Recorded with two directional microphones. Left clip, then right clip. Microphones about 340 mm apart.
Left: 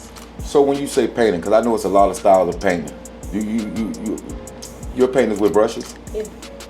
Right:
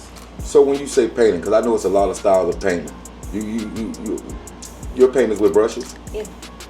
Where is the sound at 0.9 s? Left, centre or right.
Centre.